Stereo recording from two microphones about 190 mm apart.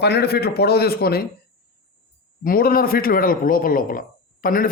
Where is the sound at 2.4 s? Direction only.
50° left (ahead or behind).